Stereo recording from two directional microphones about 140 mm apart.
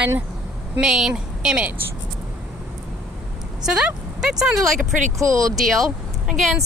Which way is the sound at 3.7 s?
5° right (ahead or behind).